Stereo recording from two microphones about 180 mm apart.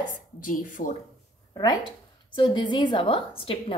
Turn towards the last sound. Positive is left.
turn(degrees=30)  # may be behind; listen again after turning